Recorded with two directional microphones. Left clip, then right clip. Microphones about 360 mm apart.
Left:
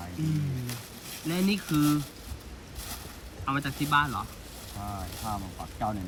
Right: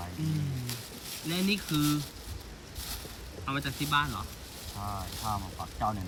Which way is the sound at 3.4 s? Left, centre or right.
Centre.